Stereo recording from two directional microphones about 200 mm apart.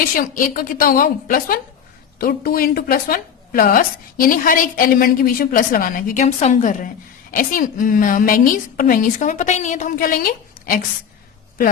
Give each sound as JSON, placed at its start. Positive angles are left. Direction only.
{"t": 0.0, "sound": "a woman's voice", "side_deg": 45}